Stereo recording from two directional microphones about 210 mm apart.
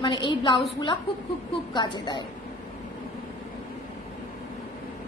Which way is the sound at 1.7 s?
20° left (ahead or behind).